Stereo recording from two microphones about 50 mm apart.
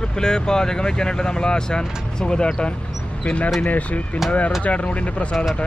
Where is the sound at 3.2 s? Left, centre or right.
Left.